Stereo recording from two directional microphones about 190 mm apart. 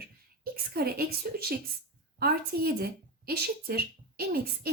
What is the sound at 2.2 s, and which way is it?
A woman's voice, 55° right (ahead or behind).